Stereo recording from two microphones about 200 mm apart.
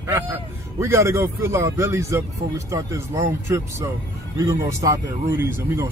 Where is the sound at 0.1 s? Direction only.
15° right (ahead or behind).